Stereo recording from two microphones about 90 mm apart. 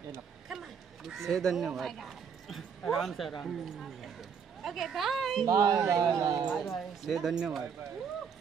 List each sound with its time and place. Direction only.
0.5 s a sound: 5° right (ahead or behind)
1.8 s speech: centre (ahead or behind)
5.4 s speech: 45° right (ahead or behind)
6.5 s speech: centre (ahead or behind)